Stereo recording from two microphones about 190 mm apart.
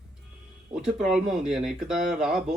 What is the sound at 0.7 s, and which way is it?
A man's voice, 5° right (ahead or behind).